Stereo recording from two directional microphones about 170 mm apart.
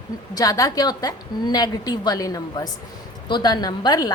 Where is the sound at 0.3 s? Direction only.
20° left (ahead or behind).